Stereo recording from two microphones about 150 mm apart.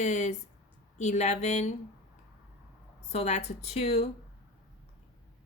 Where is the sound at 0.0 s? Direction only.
50° left (ahead or behind).